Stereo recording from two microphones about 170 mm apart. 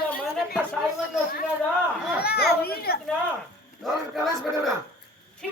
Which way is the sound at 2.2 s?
70° left (ahead or behind).